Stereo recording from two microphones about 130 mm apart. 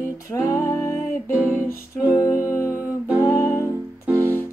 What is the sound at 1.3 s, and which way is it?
Music, 15° right (ahead or behind).